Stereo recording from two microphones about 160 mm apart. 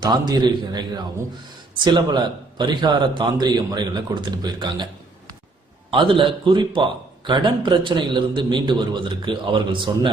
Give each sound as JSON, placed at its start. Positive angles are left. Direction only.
{"t": 0.0, "sound": "a man's voice", "side_deg": -25}
{"t": 5.9, "sound": "a man's voice", "side_deg": -30}